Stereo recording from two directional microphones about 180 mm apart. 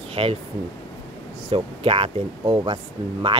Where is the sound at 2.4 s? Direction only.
20° right (ahead or behind).